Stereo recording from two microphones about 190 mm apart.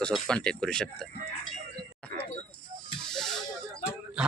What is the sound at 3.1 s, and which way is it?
Music, centre (ahead or behind).